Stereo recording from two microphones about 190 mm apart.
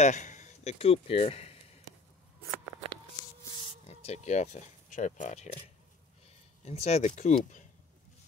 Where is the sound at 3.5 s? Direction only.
35° left (ahead or behind).